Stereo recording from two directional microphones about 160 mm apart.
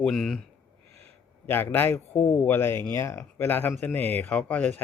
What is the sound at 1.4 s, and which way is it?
Speech, 15° left (ahead or behind).